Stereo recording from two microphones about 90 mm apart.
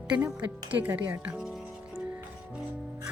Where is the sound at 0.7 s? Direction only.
20° right (ahead or behind).